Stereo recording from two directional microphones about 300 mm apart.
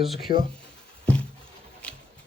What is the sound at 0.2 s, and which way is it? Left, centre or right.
Speech, left.